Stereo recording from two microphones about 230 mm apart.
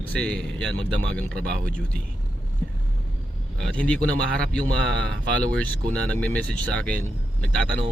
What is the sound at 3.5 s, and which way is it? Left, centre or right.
A man's voice, centre.